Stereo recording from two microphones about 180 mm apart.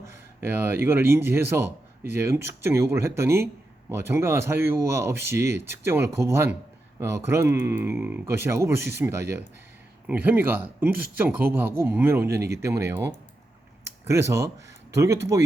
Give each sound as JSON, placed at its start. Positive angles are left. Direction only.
{"t": 0.3, "sound": "speech", "side_deg": -10}